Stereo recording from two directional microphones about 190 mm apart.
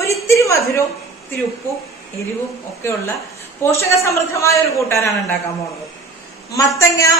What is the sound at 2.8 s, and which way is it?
A man's voice, 15° left (ahead or behind).